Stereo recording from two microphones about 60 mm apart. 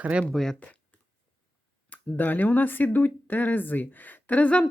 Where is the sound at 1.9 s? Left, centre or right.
Left.